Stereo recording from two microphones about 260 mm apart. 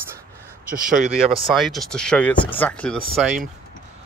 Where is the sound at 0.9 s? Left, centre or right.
Right.